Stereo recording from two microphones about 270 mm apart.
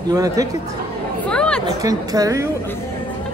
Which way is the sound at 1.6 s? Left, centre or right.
Centre.